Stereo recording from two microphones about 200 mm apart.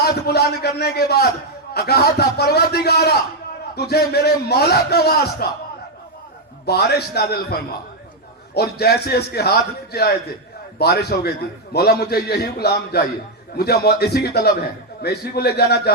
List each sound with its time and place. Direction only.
0.0 s a man's voice: 55° left (ahead or behind)
6.7 s a man's voice: 55° left (ahead or behind)